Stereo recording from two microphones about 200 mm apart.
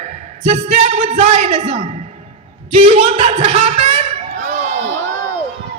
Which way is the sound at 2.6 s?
30° right (ahead or behind).